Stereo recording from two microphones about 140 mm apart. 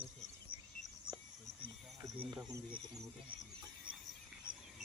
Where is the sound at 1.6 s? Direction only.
35° right (ahead or behind).